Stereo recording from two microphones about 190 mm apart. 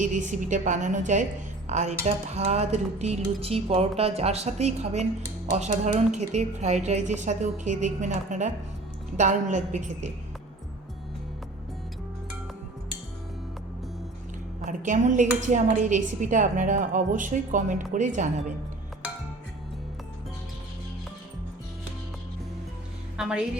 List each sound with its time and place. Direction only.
0.0 s a woman's voice: 40° right (ahead or behind)
14.6 s a woman's voice: 40° right (ahead or behind)
23.1 s a woman's voice: 5° right (ahead or behind)